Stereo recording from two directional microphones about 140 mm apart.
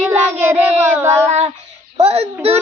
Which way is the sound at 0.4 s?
15° right (ahead or behind).